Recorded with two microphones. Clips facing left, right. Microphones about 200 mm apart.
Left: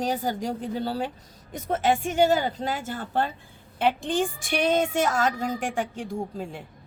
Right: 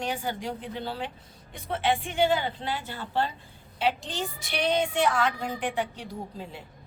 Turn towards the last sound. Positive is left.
turn(degrees=50)  # may be behind; listen again after turning